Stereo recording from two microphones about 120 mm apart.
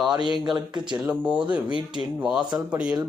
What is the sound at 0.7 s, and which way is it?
Speech, 40° right (ahead or behind).